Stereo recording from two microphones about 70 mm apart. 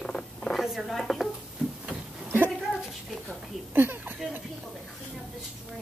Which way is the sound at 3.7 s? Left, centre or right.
Right.